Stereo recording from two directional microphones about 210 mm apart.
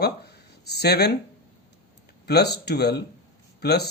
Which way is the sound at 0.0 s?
50° left (ahead or behind).